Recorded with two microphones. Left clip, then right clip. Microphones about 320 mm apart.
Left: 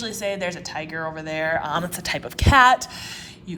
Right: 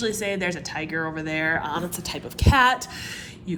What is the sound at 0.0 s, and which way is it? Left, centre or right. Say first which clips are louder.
A woman's voice: right 1 dB; centre.